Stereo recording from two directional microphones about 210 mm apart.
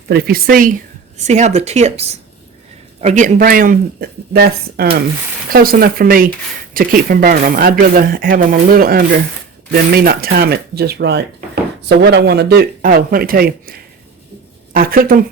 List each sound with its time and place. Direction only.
0.1 s speech: 45° right (ahead or behind)
1.2 s speech: 30° right (ahead or behind)